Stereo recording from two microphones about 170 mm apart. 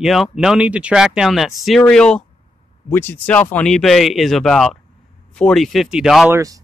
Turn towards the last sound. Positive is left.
turn(degrees=-20)  # may be behind; listen again after turning